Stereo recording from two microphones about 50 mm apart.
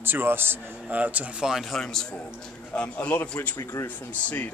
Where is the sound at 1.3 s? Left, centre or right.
Centre.